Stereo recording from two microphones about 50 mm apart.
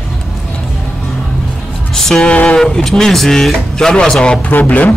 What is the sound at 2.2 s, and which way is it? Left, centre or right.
Speech, left.